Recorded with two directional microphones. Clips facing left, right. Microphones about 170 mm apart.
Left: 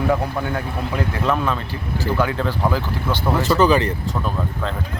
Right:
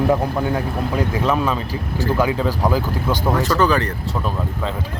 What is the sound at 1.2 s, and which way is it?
Speech, 5° right (ahead or behind).